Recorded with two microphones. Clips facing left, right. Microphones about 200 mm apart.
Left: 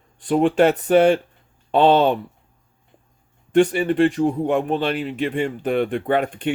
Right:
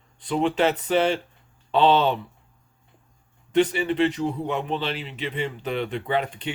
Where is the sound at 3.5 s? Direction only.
45° left (ahead or behind).